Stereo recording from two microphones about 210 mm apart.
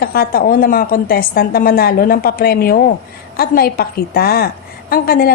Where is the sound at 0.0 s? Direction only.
45° left (ahead or behind).